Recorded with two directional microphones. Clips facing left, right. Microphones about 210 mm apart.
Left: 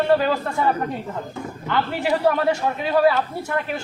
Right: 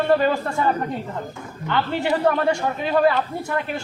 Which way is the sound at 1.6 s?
Centre (ahead or behind).